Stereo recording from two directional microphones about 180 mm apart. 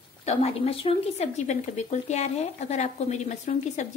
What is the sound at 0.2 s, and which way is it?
Speech, 35° left (ahead or behind).